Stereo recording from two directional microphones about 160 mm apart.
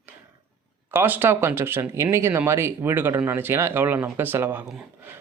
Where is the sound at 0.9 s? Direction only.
15° right (ahead or behind).